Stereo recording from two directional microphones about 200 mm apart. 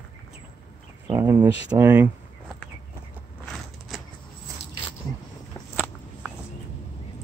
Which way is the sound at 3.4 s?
Centre (ahead or behind).